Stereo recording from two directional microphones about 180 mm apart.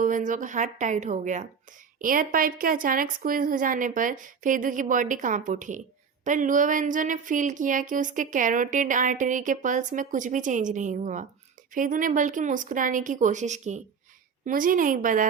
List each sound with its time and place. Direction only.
0.0 s speech: 45° right (ahead or behind)